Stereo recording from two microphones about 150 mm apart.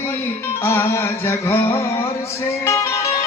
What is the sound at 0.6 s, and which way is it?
Music, 15° left (ahead or behind).